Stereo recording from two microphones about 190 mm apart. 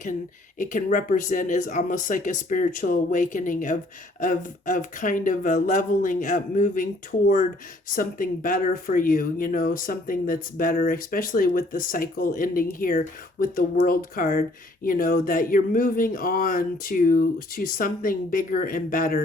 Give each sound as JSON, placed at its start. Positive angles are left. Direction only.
{"t": 0.6, "sound": "speech", "side_deg": 45}
{"t": 7.9, "sound": "speech", "side_deg": 45}